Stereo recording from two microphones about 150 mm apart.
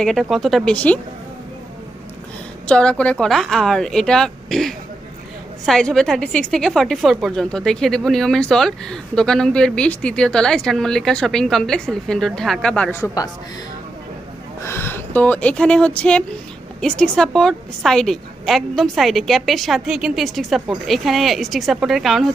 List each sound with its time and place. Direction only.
0.0 s a woman's voice: centre (ahead or behind)
2.6 s a woman's voice: 5° left (ahead or behind)
14.6 s a woman's voice: 15° left (ahead or behind); by 22.3 s centre (ahead or behind)